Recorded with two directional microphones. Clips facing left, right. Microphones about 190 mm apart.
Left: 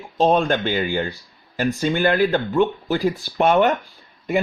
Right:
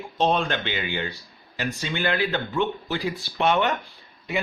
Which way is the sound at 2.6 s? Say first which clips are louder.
Left 7 dB; 40° left (ahead or behind).